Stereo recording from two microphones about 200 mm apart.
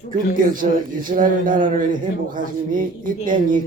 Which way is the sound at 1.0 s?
40° right (ahead or behind).